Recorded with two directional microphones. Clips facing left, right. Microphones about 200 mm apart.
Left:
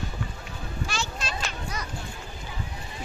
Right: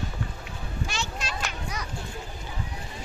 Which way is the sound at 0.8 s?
20° right (ahead or behind).